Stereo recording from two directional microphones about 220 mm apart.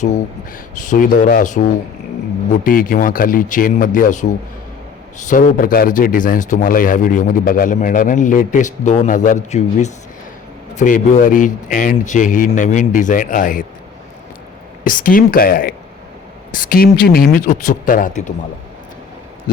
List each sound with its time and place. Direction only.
0.9 s a man's voice: 35° left (ahead or behind)
2.6 s a man's voice: 40° left (ahead or behind)
5.3 s a man's voice: 40° left (ahead or behind)
14.8 s a man's voice: 40° left (ahead or behind)